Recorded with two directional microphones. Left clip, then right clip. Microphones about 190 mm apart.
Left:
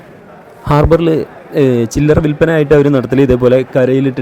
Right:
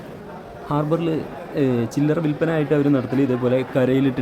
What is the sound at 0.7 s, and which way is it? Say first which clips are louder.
A man's voice: left 12 dB; 45° left (ahead or behind).